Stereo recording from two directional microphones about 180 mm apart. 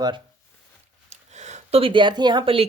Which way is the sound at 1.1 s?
40° right (ahead or behind).